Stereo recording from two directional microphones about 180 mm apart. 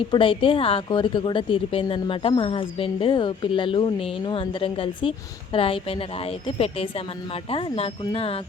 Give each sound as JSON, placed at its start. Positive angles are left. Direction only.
{"t": 0.1, "sound": "a woman's voice", "side_deg": 30}
{"t": 7.5, "sound": "speech", "side_deg": 35}